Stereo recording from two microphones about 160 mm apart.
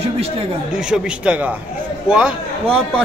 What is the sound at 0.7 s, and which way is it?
A man's voice, 5° right (ahead or behind).